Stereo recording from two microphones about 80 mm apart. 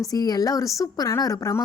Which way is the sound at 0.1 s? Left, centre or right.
Left.